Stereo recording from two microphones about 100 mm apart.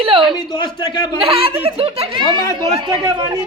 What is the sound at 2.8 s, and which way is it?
Speech, 50° right (ahead or behind).